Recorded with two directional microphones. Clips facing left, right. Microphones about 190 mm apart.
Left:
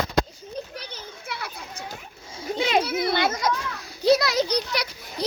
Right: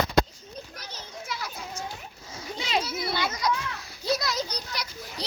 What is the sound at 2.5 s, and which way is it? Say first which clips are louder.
Speech: left 7 dB; 55° left (ahead or behind).